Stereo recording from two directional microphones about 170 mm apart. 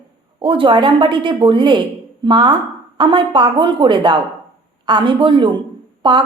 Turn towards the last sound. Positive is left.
turn(degrees=-25)  # may be behind; listen again after turning